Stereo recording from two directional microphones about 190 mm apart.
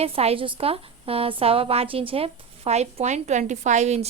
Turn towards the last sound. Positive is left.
turn(degrees=-35)  # may be behind; listen again after turning